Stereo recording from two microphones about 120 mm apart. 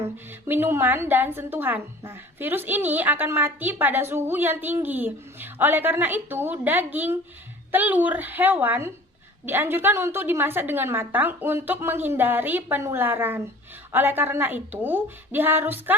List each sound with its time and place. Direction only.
0.0 s a woman's voice: 20° right (ahead or behind)